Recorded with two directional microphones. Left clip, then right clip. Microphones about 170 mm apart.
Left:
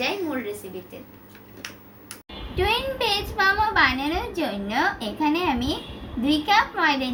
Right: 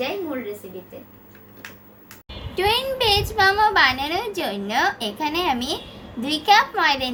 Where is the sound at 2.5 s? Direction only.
90° right.